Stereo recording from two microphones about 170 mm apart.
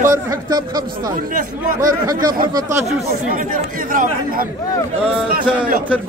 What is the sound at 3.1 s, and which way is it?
Speech, 55° right (ahead or behind).